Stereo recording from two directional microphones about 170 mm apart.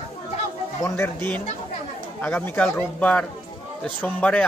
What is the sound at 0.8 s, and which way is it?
Speech, 15° left (ahead or behind).